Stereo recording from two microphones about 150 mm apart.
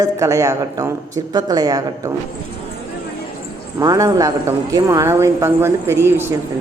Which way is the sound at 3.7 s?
25° right (ahead or behind).